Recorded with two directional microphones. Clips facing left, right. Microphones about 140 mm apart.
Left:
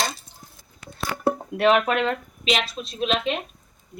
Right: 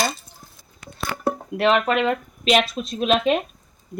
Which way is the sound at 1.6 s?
5° left (ahead or behind).